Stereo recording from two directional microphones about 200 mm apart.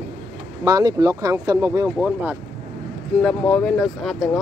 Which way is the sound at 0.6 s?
20° right (ahead or behind).